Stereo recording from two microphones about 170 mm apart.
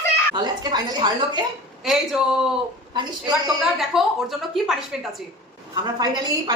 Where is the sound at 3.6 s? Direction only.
Centre (ahead or behind).